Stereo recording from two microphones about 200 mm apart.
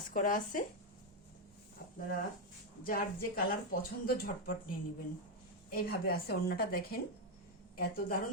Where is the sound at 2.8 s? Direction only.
45° left (ahead or behind).